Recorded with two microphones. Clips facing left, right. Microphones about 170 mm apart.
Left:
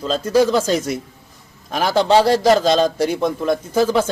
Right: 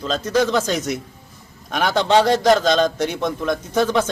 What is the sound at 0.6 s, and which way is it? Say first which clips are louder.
Speech: left 3 dB; 30° left (ahead or behind).